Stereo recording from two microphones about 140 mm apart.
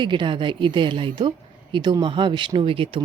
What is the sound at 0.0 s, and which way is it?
Speech, 35° right (ahead or behind).